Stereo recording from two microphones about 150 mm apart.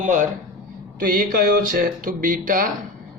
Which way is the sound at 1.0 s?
70° right (ahead or behind).